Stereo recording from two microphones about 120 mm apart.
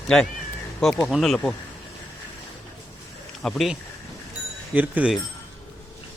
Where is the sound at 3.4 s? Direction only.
Centre (ahead or behind).